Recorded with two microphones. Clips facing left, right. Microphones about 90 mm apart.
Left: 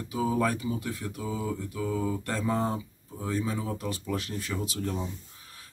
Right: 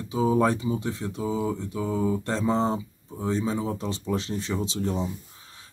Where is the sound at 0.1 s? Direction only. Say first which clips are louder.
Right 5 dB; 25° right (ahead or behind).